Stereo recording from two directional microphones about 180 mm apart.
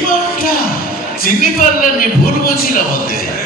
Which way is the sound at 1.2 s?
50° left (ahead or behind).